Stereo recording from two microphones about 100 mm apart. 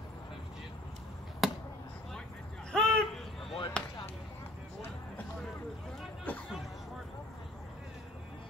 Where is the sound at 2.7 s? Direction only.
5° left (ahead or behind).